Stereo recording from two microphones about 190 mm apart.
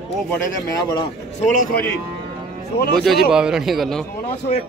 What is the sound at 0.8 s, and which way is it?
Speech, 20° left (ahead or behind).